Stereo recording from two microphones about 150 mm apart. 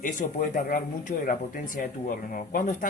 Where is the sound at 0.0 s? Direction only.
60° left (ahead or behind).